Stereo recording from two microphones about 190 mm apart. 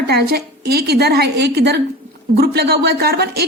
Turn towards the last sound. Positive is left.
turn(degrees=-55)  # may be behind; listen again after turning